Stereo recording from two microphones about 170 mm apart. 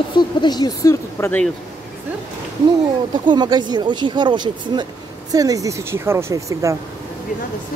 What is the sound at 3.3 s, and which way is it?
Speech, 25° right (ahead or behind).